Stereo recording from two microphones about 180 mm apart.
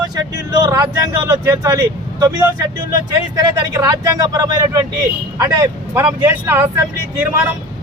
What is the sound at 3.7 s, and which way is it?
Speech, 20° right (ahead or behind).